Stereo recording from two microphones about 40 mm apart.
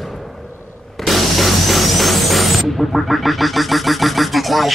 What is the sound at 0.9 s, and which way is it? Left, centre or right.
Music, centre.